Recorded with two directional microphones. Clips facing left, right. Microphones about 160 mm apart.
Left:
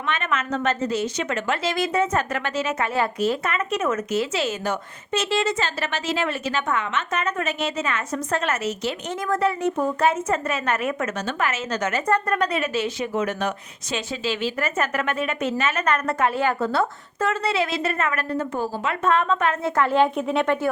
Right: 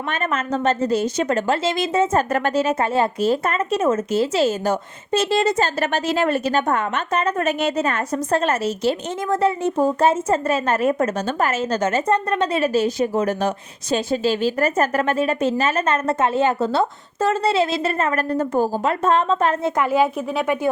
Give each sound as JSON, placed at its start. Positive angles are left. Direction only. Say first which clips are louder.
{"t": 0.1, "sound": "a woman's voice", "louder": "right 2 dB", "side_deg": -40}
{"t": 0.9, "sound": "a woman's voice", "louder": "right 5 dB", "side_deg": -45}
{"t": 1.6, "sound": "a woman's voice", "louder": "right 3 dB", "side_deg": -25}
{"t": 2.3, "sound": "a woman's voice", "louder": "right 6 dB", "side_deg": -40}
{"t": 7.4, "sound": "a woman's voice", "louder": "right 6 dB", "side_deg": -45}
{"t": 19.7, "sound": "speech", "louder": "right 1 dB", "side_deg": -10}